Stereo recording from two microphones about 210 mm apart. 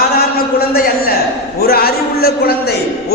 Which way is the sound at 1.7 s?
45° left (ahead or behind).